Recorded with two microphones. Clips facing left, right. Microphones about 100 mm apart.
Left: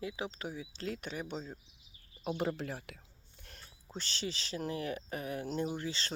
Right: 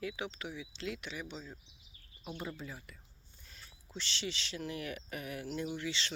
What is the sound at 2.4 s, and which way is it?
Speech, 75° left (ahead or behind).